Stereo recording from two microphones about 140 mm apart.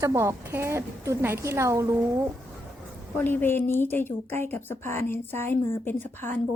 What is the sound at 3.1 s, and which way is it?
A woman's voice, 15° left (ahead or behind).